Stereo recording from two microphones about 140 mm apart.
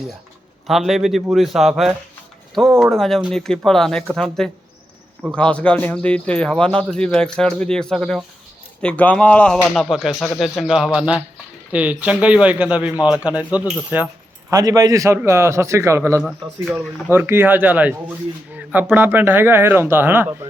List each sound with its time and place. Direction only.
0.7 s a man's voice: centre (ahead or behind)
14.5 s a man's voice: 25° right (ahead or behind)